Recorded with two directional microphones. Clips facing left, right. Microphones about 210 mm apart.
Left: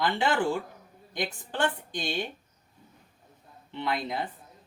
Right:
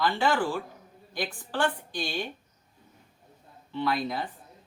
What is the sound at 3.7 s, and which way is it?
Speech, 20° left (ahead or behind).